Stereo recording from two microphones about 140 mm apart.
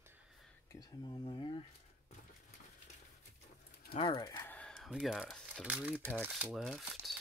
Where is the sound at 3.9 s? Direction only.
35° left (ahead or behind).